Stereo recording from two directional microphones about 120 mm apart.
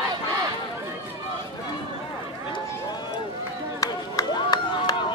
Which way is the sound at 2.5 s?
35° left (ahead or behind).